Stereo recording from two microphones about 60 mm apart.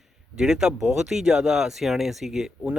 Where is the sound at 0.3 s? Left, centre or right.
Centre.